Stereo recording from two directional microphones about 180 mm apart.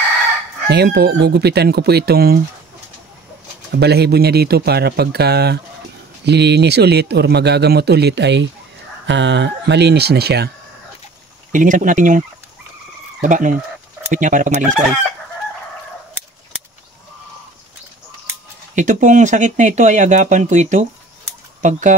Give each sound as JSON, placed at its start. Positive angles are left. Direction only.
{"t": 0.7, "sound": "speech", "side_deg": -65}
{"t": 3.7, "sound": "speech", "side_deg": -65}
{"t": 11.5, "sound": "speech", "side_deg": -45}
{"t": 13.2, "sound": "speech", "side_deg": -45}
{"t": 18.8, "sound": "speech", "side_deg": -45}